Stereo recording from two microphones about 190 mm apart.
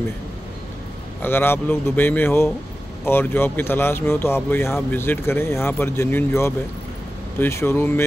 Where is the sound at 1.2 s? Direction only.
10° left (ahead or behind).